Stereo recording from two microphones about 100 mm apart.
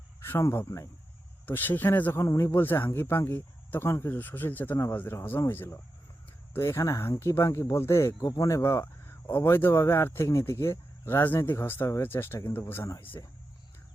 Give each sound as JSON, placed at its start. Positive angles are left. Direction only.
{"t": 0.2, "sound": "speech", "side_deg": 25}